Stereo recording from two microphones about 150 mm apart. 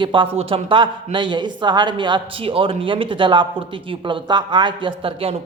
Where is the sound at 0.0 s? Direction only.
35° right (ahead or behind).